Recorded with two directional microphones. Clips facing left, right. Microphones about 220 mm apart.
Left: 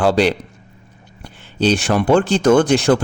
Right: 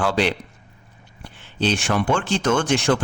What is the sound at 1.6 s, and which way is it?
Speech, 40° left (ahead or behind).